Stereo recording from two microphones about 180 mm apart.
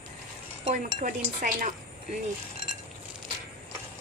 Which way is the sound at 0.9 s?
50° right (ahead or behind).